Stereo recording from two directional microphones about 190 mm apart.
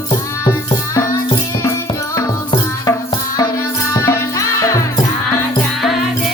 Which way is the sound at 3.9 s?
15° left (ahead or behind).